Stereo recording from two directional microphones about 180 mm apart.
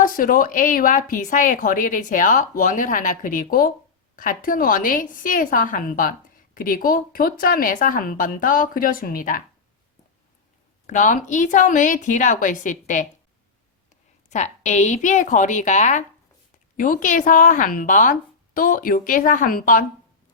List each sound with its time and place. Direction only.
0.0 s a woman's voice: 50° left (ahead or behind)
10.8 s a woman's voice: 45° left (ahead or behind)